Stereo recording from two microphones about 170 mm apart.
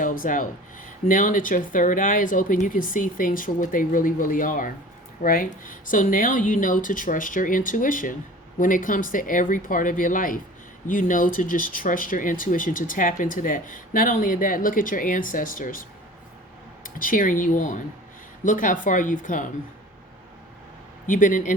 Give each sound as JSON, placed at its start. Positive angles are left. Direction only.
{"t": 0.0, "sound": "speech", "side_deg": 50}
{"t": 21.1, "sound": "speech", "side_deg": 50}